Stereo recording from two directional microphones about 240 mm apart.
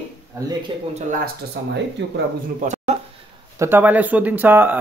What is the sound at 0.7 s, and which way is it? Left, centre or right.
Speech, right.